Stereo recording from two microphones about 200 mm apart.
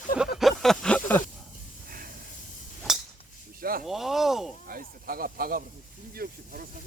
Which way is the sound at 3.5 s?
45° right (ahead or behind).